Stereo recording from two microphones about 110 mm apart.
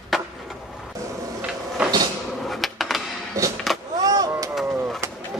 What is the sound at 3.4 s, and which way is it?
Vehicle, 25° right (ahead or behind).